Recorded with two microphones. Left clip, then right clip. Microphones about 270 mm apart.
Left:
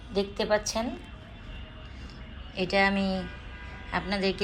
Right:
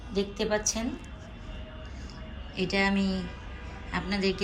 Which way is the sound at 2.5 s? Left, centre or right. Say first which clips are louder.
Left 3 dB; centre.